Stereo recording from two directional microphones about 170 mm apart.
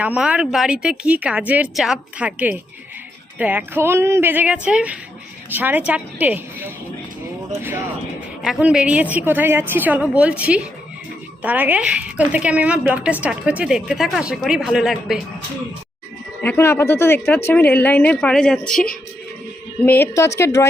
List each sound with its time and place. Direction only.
0.0 s a woman's voice: 5° right (ahead or behind)
16.4 s speech: 10° left (ahead or behind)